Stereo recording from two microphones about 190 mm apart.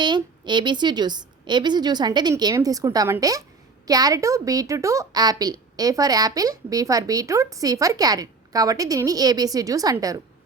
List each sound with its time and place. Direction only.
0.0 s a woman's voice: 25° right (ahead or behind)